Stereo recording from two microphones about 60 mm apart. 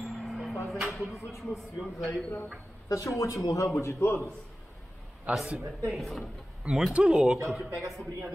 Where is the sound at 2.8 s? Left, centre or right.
Left.